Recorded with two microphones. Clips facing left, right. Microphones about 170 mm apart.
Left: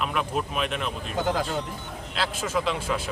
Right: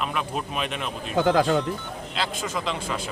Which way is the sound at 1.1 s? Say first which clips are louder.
Right 7 dB; 75° right (ahead or behind).